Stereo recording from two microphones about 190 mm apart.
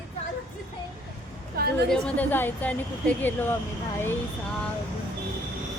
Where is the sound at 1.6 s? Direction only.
50° right (ahead or behind).